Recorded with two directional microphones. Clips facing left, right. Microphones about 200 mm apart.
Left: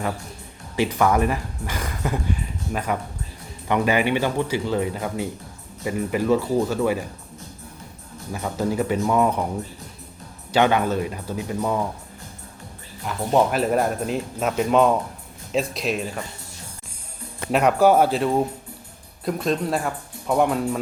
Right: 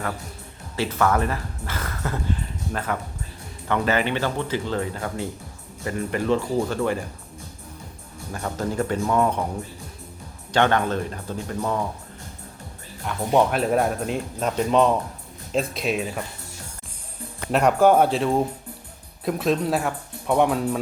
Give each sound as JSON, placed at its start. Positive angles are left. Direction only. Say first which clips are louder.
{"t": 0.8, "sound": "speech", "louder": "left 2 dB", "side_deg": 15}
{"t": 8.3, "sound": "speech", "louder": "left 3 dB", "side_deg": 10}
{"t": 10.5, "sound": "speech", "louder": "left 1 dB", "side_deg": 10}
{"t": 13.1, "sound": "speech", "louder": "even", "side_deg": 0}
{"t": 17.5, "sound": "speech", "louder": "even", "side_deg": 0}